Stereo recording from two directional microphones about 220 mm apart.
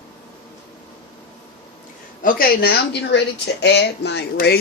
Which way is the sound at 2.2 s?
40° left (ahead or behind).